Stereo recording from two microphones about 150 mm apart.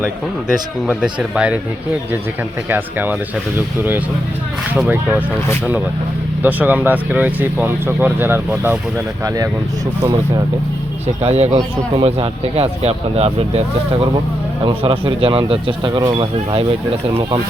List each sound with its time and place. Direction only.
0.0 s speech: 5° right (ahead or behind)
2.6 s speech: 15° right (ahead or behind)
4.7 s speech: 10° right (ahead or behind)
6.4 s speech: 10° right (ahead or behind)
10.0 s speech: 25° right (ahead or behind)
11.2 s a man's voice: 45° right (ahead or behind)
14.6 s speech: 35° right (ahead or behind)